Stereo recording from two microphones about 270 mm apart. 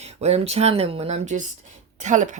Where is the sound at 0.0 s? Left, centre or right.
Right.